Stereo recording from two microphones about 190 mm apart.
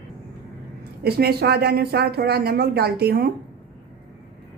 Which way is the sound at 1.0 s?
55° right (ahead or behind).